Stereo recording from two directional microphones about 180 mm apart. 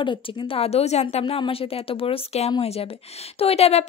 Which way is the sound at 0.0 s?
30° left (ahead or behind).